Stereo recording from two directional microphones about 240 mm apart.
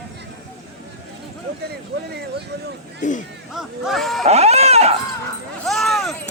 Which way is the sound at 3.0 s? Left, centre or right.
Left.